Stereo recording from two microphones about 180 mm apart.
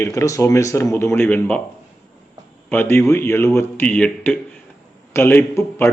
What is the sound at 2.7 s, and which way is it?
A man's voice, 15° left (ahead or behind).